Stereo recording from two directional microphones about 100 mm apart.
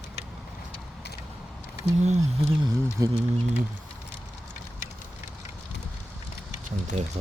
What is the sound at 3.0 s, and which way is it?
Speech, 35° right (ahead or behind).